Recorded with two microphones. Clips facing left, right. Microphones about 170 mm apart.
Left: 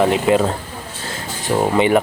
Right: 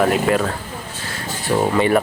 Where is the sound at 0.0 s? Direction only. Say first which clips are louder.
Left 2 dB; 20° left (ahead or behind).